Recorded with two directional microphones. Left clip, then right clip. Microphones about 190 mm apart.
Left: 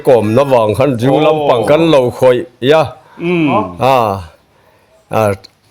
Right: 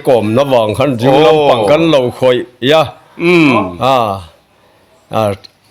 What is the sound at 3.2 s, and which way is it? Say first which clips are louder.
Speech: right 5 dB; 40° right (ahead or behind).